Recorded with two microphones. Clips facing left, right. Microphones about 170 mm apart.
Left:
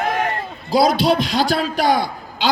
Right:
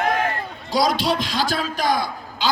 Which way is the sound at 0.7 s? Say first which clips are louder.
Left 5 dB; 40° left (ahead or behind).